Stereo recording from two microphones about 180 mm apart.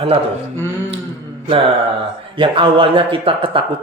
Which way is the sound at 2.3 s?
30° right (ahead or behind).